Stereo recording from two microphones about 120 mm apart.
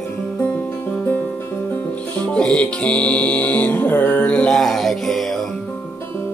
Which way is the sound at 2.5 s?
10° left (ahead or behind).